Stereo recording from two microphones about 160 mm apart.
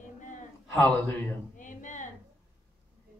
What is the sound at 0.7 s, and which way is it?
Speech, 10° left (ahead or behind).